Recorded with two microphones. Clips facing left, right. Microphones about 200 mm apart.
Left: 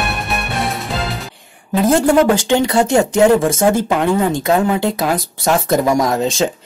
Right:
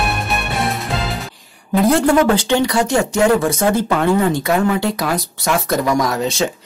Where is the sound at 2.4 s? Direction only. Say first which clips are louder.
Left 2 dB; 20° left (ahead or behind).